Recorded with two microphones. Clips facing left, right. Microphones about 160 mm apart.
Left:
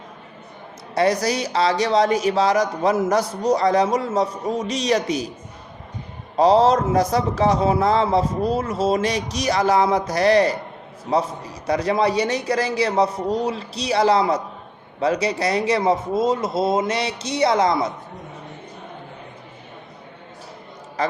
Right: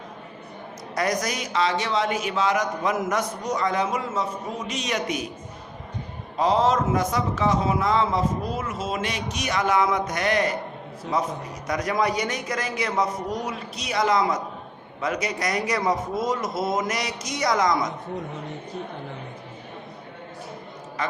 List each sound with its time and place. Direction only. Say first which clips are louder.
0.9 s a man's voice: left 6 dB; 30° left (ahead or behind)
6.3 s a man's voice: left 6 dB; 35° left (ahead or behind)
21.0 s a man's voice: left 6 dB; 35° left (ahead or behind)